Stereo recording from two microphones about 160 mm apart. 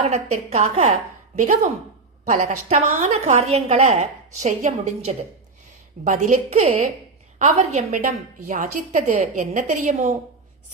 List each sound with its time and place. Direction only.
0.0 s a woman's voice: 45° right (ahead or behind)